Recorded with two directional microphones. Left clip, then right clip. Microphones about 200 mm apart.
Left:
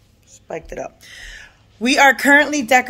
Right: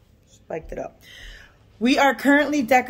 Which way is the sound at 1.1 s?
10° right (ahead or behind).